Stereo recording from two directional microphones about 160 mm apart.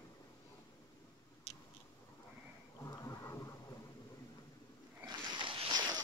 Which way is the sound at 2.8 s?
20° left (ahead or behind).